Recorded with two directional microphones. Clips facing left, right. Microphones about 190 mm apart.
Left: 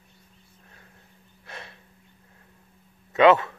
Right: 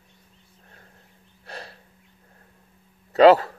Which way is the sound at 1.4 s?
35° right (ahead or behind).